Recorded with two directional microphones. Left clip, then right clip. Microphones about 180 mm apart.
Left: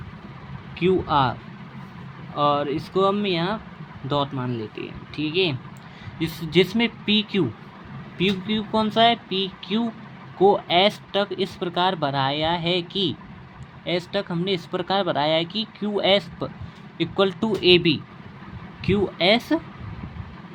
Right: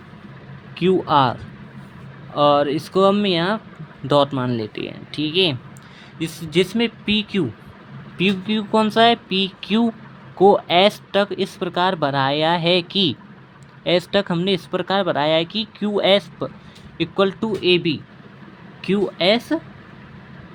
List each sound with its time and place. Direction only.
0.8 s speech: 15° right (ahead or behind)
6.1 s speech: 5° right (ahead or behind)
8.2 s speech: 15° right (ahead or behind); by 18.0 s centre (ahead or behind)
18.8 s speech: 10° right (ahead or behind)